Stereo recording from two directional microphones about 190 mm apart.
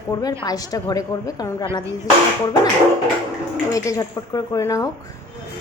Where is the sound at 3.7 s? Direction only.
20° left (ahead or behind).